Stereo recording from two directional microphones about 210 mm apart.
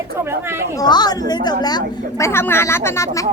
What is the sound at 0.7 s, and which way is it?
A woman's voice, 20° left (ahead or behind).